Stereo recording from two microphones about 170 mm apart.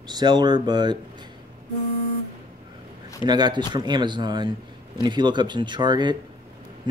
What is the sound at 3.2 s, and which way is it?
Speech, 25° right (ahead or behind).